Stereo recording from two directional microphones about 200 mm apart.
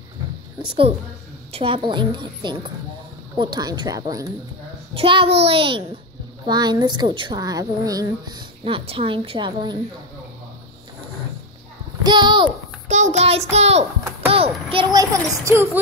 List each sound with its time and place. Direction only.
1.5 s a woman's voice: 25° right (ahead or behind)
12.0 s a child's voice: 20° right (ahead or behind)
12.8 s a child's voice: 35° right (ahead or behind); by 15.8 s 10° right (ahead or behind)